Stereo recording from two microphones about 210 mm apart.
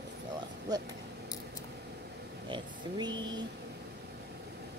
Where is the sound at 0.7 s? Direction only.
20° right (ahead or behind).